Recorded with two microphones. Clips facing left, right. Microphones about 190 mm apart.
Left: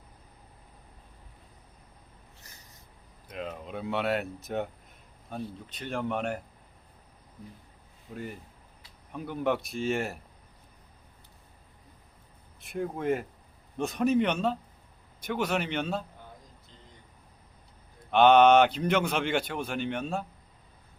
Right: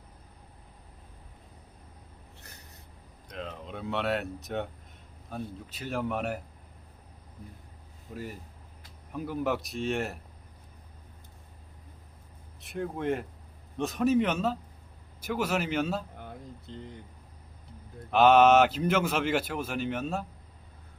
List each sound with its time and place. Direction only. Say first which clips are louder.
3.2 s speech: left 2 dB; 5° left (ahead or behind)
8.1 s speech: even; centre (ahead or behind)
12.5 s speech: left 1 dB; centre (ahead or behind)
16.1 s a sound: right 7 dB; 65° right (ahead or behind)
18.1 s speech: left 1 dB; 5° right (ahead or behind)